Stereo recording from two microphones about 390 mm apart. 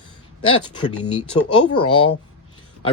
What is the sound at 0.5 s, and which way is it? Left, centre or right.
Speech, centre.